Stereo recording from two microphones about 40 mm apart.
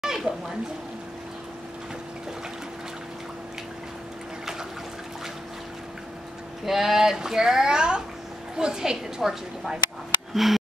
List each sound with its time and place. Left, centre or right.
0.0 s a sound: centre
6.6 s speech: centre
9.2 s speech: centre